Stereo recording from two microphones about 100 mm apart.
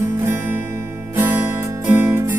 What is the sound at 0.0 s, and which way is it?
Music, 25° right (ahead or behind).